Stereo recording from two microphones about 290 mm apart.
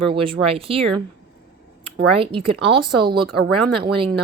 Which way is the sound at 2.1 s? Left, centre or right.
Centre.